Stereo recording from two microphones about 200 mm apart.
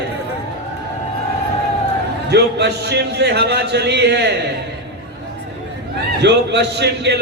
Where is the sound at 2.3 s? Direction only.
60° right (ahead or behind).